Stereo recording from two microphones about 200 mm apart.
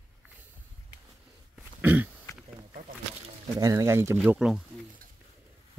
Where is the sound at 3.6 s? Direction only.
15° right (ahead or behind).